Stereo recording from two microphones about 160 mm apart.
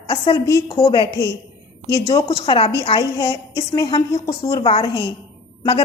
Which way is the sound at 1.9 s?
20° left (ahead or behind).